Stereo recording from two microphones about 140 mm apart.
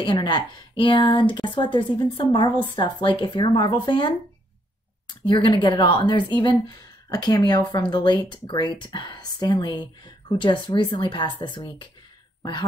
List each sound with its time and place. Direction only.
0.0 s speech: 35° left (ahead or behind)
5.2 s speech: 35° left (ahead or behind)